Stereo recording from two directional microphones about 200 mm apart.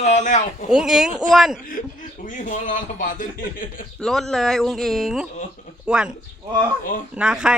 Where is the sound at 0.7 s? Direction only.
Centre (ahead or behind).